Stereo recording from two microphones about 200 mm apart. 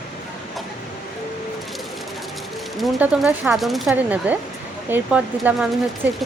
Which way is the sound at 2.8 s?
Centre (ahead or behind).